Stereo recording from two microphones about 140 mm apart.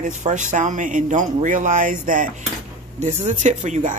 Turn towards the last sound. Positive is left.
turn(degrees=-60)  # may be behind; listen again after turning